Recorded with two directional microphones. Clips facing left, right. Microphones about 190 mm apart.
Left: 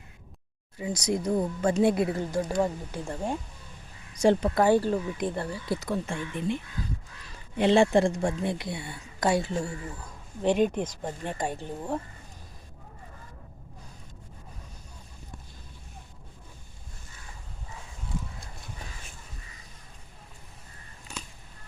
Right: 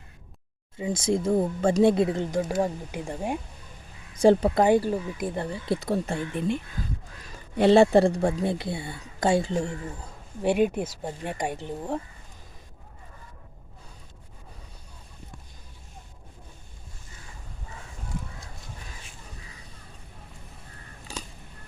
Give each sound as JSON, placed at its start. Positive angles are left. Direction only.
{"t": 0.8, "sound": "speech", "side_deg": -25}
{"t": 4.1, "sound": "speech", "side_deg": -30}
{"t": 4.6, "sound": "speech", "side_deg": -15}
{"t": 5.4, "sound": "speech", "side_deg": -20}
{"t": 10.4, "sound": "speech", "side_deg": -10}